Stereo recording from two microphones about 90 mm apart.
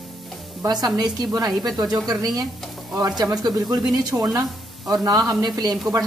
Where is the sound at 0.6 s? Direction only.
45° right (ahead or behind).